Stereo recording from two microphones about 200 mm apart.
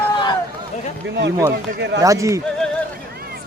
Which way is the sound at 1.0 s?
65° right (ahead or behind).